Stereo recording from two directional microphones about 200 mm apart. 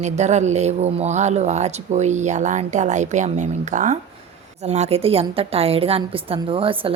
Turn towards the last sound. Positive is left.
turn(degrees=-25)  # may be behind; listen again after turning